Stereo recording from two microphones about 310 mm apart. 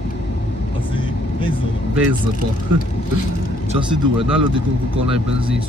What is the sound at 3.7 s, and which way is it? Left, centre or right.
Speech, centre.